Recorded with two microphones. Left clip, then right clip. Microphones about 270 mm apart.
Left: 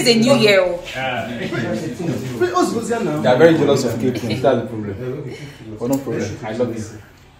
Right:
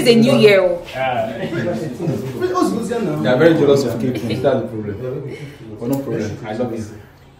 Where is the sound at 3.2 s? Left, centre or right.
Centre.